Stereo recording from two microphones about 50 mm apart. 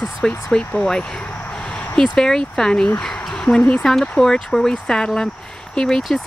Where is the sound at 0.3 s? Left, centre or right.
Left.